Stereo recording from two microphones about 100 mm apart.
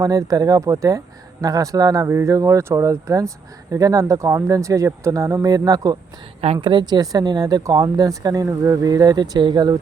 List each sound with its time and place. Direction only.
0.0 s speech: 35° right (ahead or behind)
6.6 s speech: 50° right (ahead or behind)